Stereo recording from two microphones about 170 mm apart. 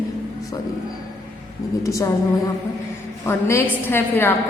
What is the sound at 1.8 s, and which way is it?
Speech, 20° left (ahead or behind).